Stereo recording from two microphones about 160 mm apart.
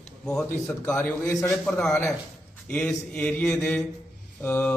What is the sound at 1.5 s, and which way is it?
A man's voice, 5° left (ahead or behind).